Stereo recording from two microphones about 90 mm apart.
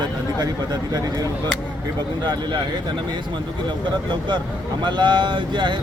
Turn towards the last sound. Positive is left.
turn(degrees=-60)  # may be behind; listen again after turning